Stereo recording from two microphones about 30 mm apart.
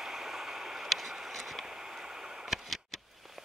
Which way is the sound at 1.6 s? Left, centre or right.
Centre.